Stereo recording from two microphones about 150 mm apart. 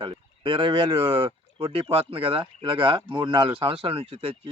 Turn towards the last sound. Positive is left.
turn(degrees=-40)  # may be behind; listen again after turning